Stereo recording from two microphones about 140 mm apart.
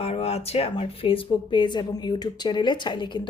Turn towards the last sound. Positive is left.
turn(degrees=35)  # may be behind; listen again after turning